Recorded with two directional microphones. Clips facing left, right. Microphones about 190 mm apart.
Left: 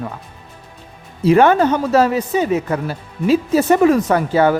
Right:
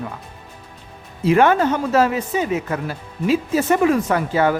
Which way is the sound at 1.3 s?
35° left (ahead or behind).